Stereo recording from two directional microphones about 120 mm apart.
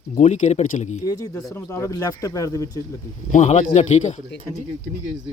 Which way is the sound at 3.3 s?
70° left (ahead or behind).